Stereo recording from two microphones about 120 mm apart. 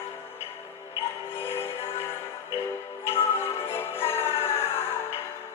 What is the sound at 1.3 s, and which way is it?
Music, 20° left (ahead or behind).